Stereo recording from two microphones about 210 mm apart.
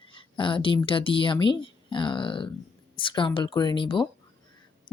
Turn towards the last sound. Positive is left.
turn(degrees=20)  # may be behind; listen again after turning